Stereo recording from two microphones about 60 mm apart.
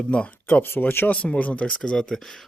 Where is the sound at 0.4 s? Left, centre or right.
Left.